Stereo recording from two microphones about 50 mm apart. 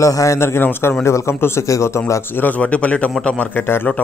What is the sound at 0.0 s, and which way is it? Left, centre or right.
Speech, left.